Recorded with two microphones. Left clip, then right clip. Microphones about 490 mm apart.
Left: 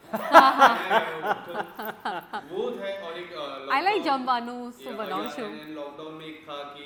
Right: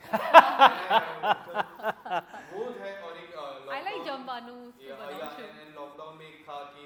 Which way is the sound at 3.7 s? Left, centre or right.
Left.